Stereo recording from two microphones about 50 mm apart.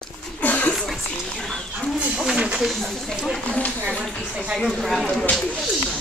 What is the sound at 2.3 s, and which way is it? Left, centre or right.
Snake, centre.